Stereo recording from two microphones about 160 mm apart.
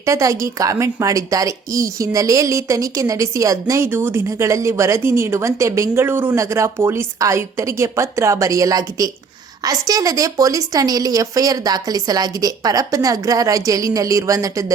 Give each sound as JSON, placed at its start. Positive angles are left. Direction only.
{"t": 0.0, "sound": "a woman's voice", "side_deg": -20}